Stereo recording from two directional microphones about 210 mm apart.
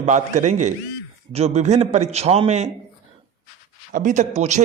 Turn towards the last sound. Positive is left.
turn(degrees=-30)  # may be behind; listen again after turning